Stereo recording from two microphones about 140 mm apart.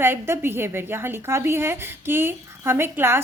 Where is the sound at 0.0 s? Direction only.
15° right (ahead or behind).